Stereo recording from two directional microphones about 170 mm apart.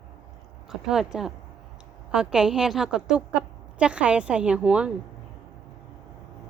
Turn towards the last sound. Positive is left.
turn(degrees=-5)  # may be behind; listen again after turning